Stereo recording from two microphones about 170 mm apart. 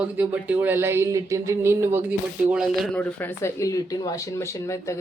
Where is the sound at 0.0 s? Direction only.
10° right (ahead or behind).